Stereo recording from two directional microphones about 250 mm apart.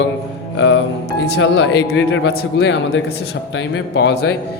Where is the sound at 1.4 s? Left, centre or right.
Left.